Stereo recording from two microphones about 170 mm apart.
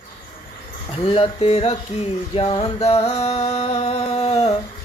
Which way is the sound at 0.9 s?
35° left (ahead or behind).